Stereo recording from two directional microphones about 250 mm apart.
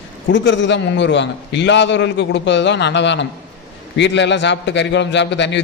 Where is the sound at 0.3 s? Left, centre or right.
Left.